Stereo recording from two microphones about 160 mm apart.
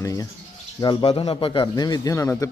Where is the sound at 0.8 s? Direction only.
30° left (ahead or behind).